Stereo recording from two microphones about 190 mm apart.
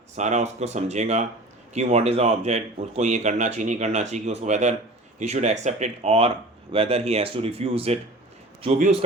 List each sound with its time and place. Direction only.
0.2 s speech: 40° right (ahead or behind)